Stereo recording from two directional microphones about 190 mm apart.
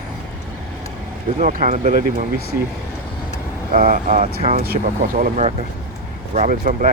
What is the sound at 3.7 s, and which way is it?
Speech, 50° right (ahead or behind).